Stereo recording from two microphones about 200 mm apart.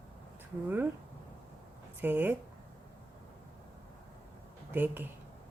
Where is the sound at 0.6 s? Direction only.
10° right (ahead or behind).